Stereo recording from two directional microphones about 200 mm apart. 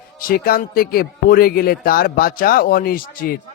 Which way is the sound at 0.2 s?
45° left (ahead or behind).